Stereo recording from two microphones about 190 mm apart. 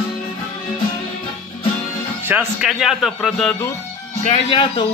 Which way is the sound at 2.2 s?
10° right (ahead or behind).